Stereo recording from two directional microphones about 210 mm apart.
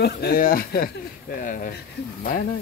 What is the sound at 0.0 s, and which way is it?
Speech, 45° left (ahead or behind).